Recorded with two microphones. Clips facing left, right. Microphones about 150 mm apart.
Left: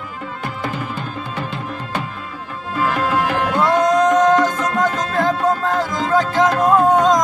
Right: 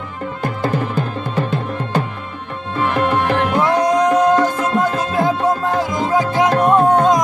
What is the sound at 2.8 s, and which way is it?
Tabla, 25° right (ahead or behind).